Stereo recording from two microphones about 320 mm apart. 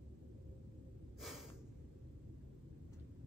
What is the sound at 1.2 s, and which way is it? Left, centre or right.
Gasp, centre.